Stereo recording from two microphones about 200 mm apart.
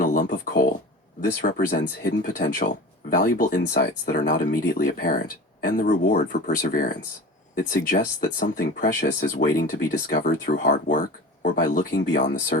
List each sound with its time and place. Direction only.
0.0 s a sound: 45° left (ahead or behind)
1.4 s speech: 45° left (ahead or behind)
12.2 s speech: 45° left (ahead or behind)